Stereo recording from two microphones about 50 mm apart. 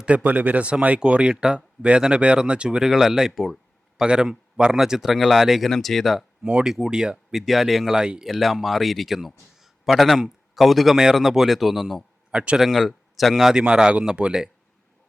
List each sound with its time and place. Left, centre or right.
0.0 s speech: right; by 4.0 s centre
4.0 s a man's voice: centre
6.4 s speech: right
6.7 s speech: centre
7.4 s a man's voice: centre
8.0 s speech: centre
8.3 s a man's voice: centre
12.3 s speech: right
12.5 s a man's voice: centre
13.5 s speech: centre